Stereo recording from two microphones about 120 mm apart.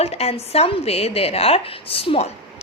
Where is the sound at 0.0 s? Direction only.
60° left (ahead or behind).